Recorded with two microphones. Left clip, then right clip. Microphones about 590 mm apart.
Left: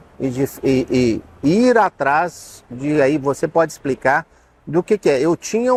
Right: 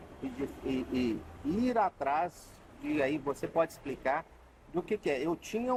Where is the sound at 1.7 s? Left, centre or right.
Left.